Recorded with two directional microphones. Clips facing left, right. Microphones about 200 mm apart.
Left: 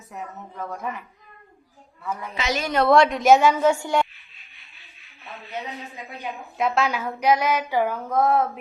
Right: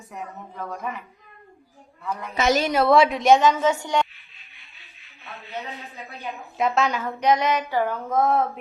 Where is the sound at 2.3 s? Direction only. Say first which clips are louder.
Right 7 dB; 45° right (ahead or behind).